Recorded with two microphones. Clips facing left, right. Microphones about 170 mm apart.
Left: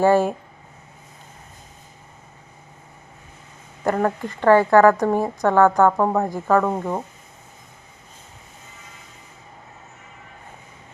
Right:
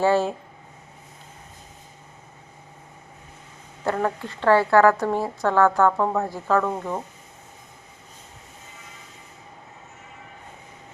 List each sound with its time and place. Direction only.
0.0 s a woman's voice: 15° left (ahead or behind)
3.8 s a woman's voice: 15° left (ahead or behind)
6.7 s speech: 30° left (ahead or behind)